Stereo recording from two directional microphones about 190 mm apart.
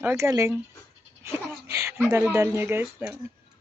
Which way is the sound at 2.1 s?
10° right (ahead or behind).